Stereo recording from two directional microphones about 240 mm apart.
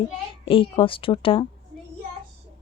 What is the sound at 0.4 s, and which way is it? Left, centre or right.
Speech, left.